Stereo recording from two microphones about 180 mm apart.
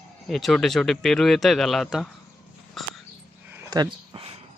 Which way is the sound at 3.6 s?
20° right (ahead or behind).